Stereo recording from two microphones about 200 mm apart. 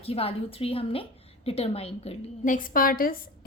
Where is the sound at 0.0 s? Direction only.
30° left (ahead or behind).